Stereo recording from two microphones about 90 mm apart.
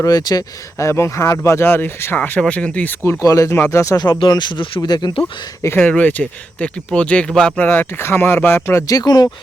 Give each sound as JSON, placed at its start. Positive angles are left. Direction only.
{"t": 0.0, "sound": "speech", "side_deg": 45}
{"t": 0.9, "sound": "speech", "side_deg": 30}
{"t": 3.2, "sound": "speech", "side_deg": 35}
{"t": 4.2, "sound": "speech", "side_deg": 55}
{"t": 4.8, "sound": "speech", "side_deg": 50}
{"t": 5.8, "sound": "speech", "side_deg": 15}
{"t": 7.7, "sound": "speech", "side_deg": 25}
{"t": 8.9, "sound": "speech", "side_deg": 50}